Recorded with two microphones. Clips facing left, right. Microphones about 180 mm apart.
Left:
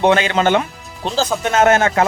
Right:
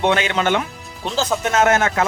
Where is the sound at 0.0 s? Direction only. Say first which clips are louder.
Left 4 dB; 35° left (ahead or behind).